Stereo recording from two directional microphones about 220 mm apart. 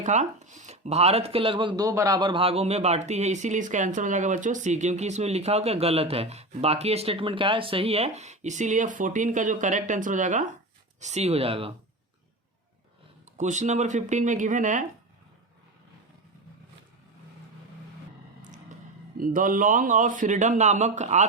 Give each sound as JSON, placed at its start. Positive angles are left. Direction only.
{"t": 0.0, "sound": "speech", "side_deg": -35}
{"t": 13.3, "sound": "speech", "side_deg": -35}
{"t": 19.1, "sound": "speech", "side_deg": -40}